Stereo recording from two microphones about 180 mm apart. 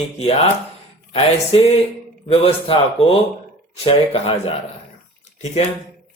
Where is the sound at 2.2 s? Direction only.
30° left (ahead or behind).